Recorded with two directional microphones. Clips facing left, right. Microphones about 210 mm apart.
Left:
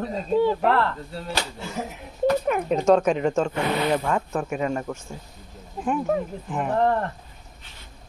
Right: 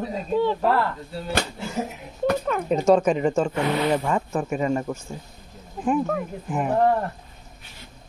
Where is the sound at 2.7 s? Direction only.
5° right (ahead or behind).